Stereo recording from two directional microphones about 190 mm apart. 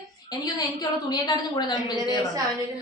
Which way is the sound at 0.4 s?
20° left (ahead or behind).